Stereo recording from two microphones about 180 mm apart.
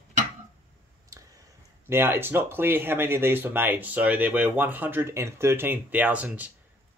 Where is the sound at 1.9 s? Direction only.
15° right (ahead or behind).